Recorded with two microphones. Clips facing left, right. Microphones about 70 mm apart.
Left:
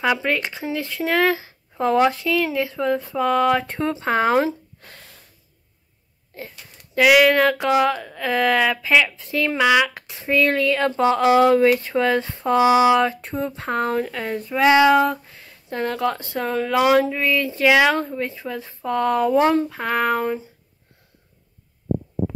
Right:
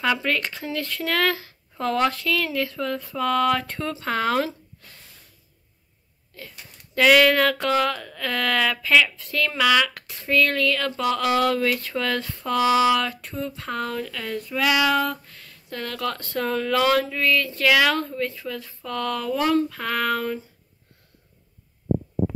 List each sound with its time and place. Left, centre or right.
0.0 s speech: centre
7.0 s speech: centre